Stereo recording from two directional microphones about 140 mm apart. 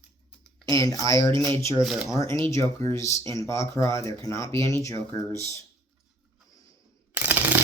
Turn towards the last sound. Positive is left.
turn(degrees=-10)  # may be behind; listen again after turning